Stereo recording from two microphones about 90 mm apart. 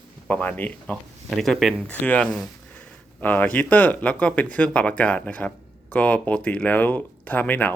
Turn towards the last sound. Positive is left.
turn(degrees=20)  # may be behind; listen again after turning